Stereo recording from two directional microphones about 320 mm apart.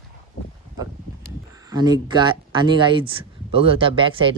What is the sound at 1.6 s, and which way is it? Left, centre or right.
Speech, centre.